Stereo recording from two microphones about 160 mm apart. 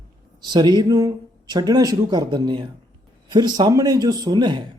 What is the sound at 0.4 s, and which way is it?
Speech, 25° right (ahead or behind).